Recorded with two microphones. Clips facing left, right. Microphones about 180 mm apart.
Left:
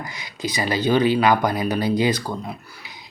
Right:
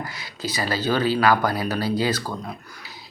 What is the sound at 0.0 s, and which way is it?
Speech, 15° left (ahead or behind).